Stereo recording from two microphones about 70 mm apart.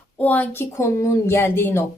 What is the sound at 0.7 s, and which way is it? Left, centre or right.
Speech, left.